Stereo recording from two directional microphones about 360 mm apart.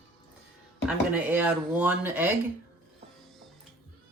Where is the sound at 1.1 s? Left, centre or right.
Centre.